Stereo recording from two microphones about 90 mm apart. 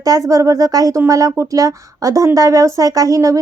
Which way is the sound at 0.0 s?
40° right (ahead or behind).